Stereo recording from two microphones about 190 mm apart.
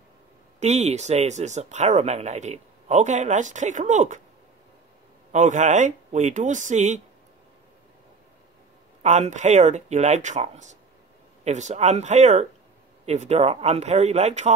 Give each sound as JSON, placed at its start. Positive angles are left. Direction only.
{"t": 0.6, "sound": "speech", "side_deg": -35}
{"t": 5.3, "sound": "speech", "side_deg": -40}
{"t": 9.0, "sound": "speech", "side_deg": -40}